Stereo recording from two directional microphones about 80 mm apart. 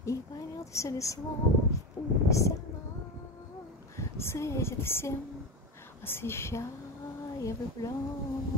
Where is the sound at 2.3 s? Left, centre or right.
Left.